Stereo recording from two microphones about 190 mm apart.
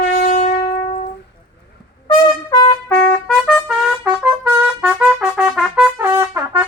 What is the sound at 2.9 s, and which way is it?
Trumpet, 5° left (ahead or behind).